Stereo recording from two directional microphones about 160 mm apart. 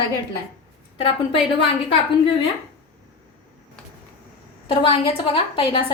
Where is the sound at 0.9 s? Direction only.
30° left (ahead or behind).